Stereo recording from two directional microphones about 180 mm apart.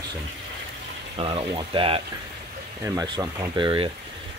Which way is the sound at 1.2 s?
30° right (ahead or behind).